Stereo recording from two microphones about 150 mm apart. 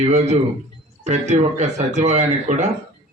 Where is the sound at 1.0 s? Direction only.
50° right (ahead or behind).